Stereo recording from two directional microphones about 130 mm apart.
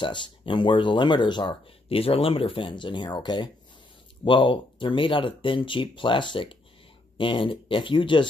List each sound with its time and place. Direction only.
0.0 s speech: 40° left (ahead or behind)